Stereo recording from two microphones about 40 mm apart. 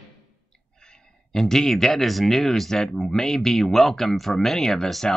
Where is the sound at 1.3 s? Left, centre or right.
Centre.